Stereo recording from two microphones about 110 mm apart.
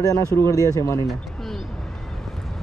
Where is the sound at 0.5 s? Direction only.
30° right (ahead or behind).